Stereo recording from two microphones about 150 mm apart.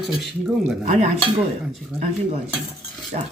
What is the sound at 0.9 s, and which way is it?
Speech, 55° right (ahead or behind).